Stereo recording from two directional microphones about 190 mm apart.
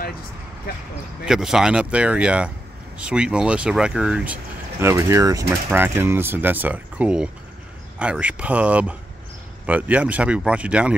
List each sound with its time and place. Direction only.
0.7 s speech: 50° left (ahead or behind)
1.2 s speech: 5° right (ahead or behind)